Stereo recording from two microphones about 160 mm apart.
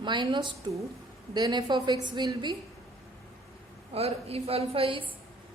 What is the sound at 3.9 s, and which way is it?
A woman's voice, 40° right (ahead or behind).